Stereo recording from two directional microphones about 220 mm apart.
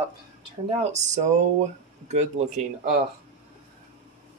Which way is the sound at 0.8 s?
35° right (ahead or behind).